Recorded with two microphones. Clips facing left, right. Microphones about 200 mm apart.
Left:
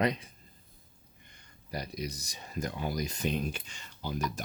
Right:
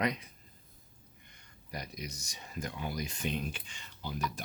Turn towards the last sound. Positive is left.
turn(degrees=45)  # may be behind; listen again after turning